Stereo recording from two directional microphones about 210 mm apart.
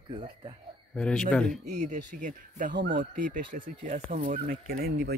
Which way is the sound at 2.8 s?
55° right (ahead or behind).